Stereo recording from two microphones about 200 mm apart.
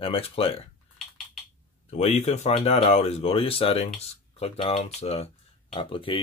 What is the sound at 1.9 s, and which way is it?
Speech, 30° left (ahead or behind).